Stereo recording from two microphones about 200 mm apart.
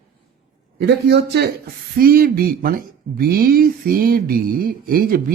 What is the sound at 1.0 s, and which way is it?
Speech, 55° right (ahead or behind).